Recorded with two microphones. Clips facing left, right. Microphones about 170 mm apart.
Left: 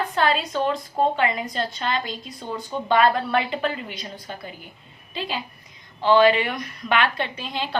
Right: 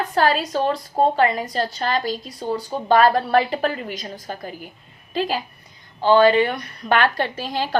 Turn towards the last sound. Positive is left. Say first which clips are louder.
# right 4 dB
turn(degrees=-40)  # may be behind; listen again after turning